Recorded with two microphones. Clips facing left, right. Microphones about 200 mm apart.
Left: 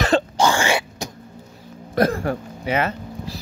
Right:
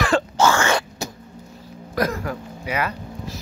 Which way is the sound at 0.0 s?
20° left (ahead or behind).